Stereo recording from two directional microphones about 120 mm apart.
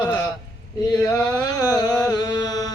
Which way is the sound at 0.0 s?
35° left (ahead or behind).